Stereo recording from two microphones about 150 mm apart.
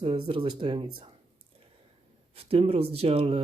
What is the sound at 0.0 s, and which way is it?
Speech, 35° right (ahead or behind).